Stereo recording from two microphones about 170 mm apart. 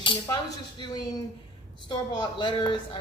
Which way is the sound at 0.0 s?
30° left (ahead or behind).